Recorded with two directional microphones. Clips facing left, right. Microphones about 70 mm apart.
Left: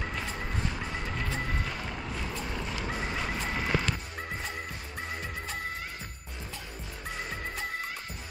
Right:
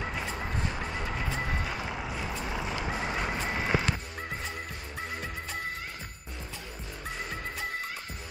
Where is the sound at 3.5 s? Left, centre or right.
Centre.